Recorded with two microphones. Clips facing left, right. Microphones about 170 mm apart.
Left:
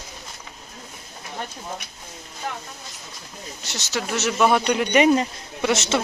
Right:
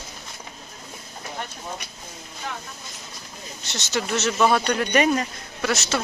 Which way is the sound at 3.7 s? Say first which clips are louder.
Right 1 dB; 10° left (ahead or behind).